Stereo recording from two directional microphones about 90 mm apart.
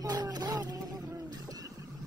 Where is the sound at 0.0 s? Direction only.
45° right (ahead or behind).